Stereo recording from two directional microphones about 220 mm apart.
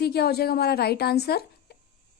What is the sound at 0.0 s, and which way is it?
A woman's voice, 45° left (ahead or behind).